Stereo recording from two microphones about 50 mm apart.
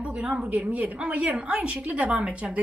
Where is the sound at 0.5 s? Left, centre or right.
Right.